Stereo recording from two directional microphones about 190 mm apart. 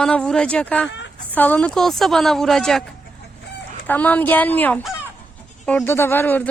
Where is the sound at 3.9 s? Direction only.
10° left (ahead or behind).